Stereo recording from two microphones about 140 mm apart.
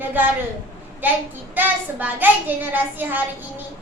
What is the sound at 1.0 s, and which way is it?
A child's voice, 15° right (ahead or behind).